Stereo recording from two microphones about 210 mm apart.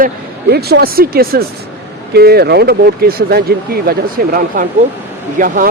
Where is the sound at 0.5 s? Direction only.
50° right (ahead or behind).